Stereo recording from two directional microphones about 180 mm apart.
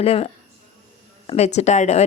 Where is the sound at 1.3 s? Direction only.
40° left (ahead or behind).